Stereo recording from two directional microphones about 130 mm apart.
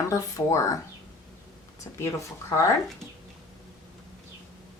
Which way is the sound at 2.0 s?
20° left (ahead or behind).